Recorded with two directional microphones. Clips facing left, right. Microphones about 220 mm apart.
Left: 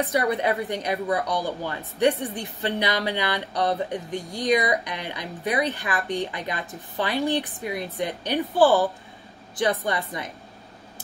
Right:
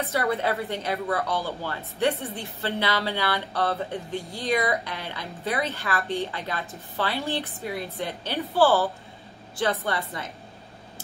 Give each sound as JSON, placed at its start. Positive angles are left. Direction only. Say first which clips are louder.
{"t": 0.1, "sound": "a woman's voice", "louder": "left 2 dB", "side_deg": 15}